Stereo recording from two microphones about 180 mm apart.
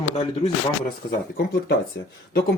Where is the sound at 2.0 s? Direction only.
75° left (ahead or behind).